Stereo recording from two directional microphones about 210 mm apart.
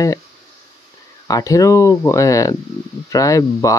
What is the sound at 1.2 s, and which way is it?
Speech, 15° left (ahead or behind).